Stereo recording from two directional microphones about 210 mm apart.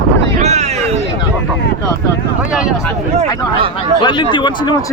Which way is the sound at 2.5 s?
5° right (ahead or behind).